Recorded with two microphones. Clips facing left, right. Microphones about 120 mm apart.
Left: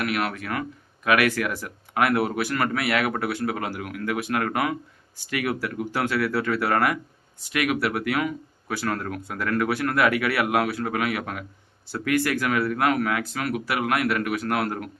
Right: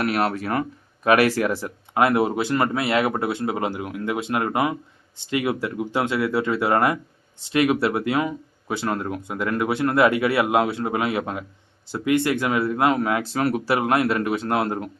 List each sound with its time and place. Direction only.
0.0 s speech: 35° right (ahead or behind)